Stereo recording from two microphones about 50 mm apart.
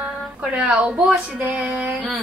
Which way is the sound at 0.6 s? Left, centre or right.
Right.